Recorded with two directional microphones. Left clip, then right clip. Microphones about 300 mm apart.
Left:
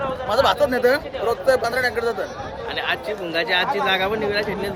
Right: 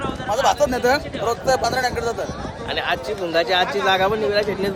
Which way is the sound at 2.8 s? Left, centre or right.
Centre.